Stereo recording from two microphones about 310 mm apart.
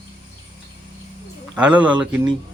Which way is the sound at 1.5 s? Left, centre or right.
Centre.